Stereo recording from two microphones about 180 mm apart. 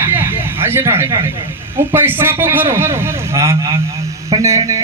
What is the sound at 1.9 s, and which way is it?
A man's voice, 10° right (ahead or behind).